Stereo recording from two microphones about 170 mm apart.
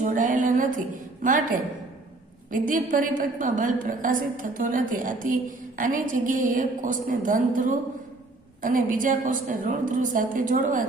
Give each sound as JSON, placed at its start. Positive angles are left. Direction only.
{"t": 0.0, "sound": "a woman's voice", "side_deg": -45}